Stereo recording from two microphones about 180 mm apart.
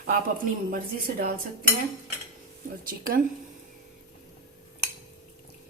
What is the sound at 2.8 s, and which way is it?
Speech, 50° right (ahead or behind).